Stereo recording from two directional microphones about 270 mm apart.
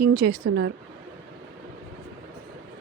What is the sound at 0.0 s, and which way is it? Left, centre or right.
Speech, right.